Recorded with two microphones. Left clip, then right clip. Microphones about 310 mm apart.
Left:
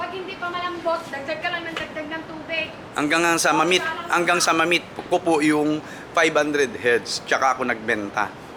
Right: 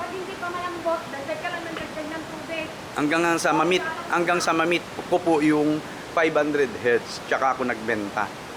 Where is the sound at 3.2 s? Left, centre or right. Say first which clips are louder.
Left 2 dB; centre.